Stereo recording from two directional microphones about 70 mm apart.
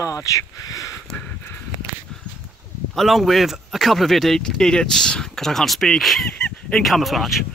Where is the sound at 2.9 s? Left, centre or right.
Centre.